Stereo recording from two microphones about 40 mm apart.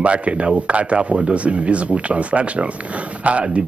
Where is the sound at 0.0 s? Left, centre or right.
Right.